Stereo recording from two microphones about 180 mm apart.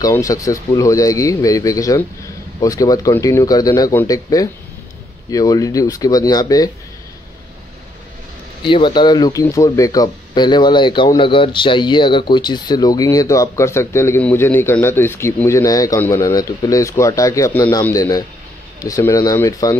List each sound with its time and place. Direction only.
0.0 s speech: 20° left (ahead or behind)
8.6 s speech: 25° left (ahead or behind)